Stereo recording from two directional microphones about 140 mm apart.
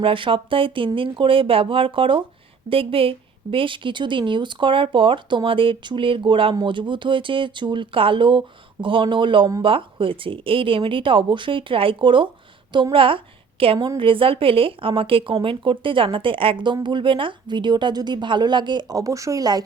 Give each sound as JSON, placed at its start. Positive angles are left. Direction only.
{"t": 0.0, "sound": "a woman's voice", "side_deg": -40}